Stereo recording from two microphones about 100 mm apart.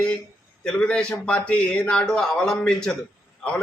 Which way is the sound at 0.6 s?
10° left (ahead or behind).